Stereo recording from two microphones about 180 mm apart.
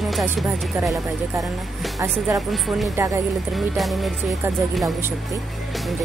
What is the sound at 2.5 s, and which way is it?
Music, centre (ahead or behind).